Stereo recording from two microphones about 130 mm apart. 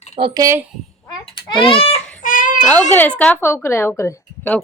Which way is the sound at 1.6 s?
45° left (ahead or behind).